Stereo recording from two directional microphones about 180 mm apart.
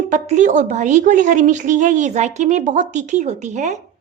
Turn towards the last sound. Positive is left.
turn(degrees=-40)  # may be behind; listen again after turning